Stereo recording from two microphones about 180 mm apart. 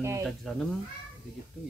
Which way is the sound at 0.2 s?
Centre (ahead or behind).